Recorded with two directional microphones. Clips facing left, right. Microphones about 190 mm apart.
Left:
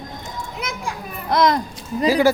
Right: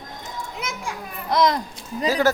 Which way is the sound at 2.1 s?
10° left (ahead or behind).